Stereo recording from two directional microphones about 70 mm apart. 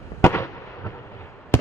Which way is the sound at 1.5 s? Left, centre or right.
Left.